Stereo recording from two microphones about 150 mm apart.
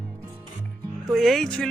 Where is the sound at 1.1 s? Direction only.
Centre (ahead or behind).